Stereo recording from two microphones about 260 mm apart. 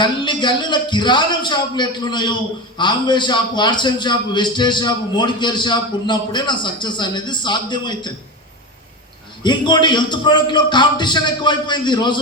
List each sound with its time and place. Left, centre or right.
0.0 s a man's voice: centre
9.4 s a man's voice: centre